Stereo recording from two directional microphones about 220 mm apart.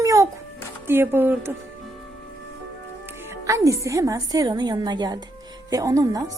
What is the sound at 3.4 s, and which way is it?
A woman's voice, 15° right (ahead or behind).